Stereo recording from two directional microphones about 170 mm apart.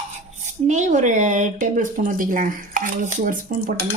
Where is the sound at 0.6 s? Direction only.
45° right (ahead or behind).